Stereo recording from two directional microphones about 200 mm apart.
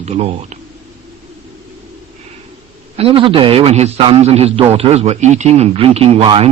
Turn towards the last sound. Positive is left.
turn(degrees=-30)  # may be behind; listen again after turning